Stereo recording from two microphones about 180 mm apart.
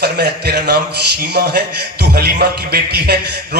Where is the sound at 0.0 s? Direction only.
65° right (ahead or behind).